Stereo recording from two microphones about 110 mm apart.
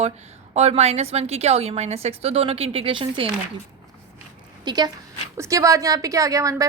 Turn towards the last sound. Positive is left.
turn(degrees=-30)  # may be behind; listen again after turning